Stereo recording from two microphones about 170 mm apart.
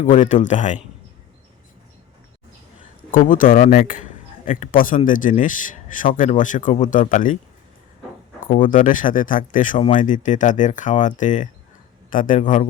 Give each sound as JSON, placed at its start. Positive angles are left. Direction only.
{"t": 0.0, "sound": "speech", "side_deg": 45}
{"t": 3.1, "sound": "speech", "side_deg": 55}
{"t": 8.4, "sound": "speech", "side_deg": 55}